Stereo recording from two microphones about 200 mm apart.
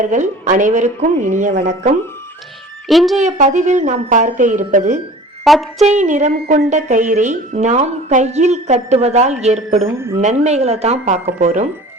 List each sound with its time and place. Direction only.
0.0 s a woman's voice: 40° right (ahead or behind)
2.8 s speech: centre (ahead or behind)
3.2 s a woman's voice: 35° right (ahead or behind)
5.5 s speech: centre (ahead or behind)
5.8 s a woman's voice: 35° right (ahead or behind)